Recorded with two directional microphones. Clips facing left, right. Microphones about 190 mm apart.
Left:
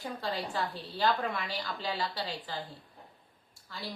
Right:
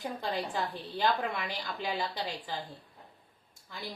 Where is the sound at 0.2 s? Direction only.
20° right (ahead or behind).